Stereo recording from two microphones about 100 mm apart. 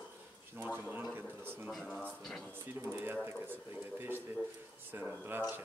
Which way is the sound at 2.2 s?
Centre (ahead or behind).